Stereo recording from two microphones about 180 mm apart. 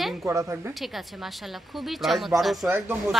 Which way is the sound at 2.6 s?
10° right (ahead or behind).